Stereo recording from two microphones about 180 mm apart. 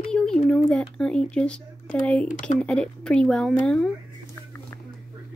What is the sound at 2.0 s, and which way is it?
Speech, 5° left (ahead or behind).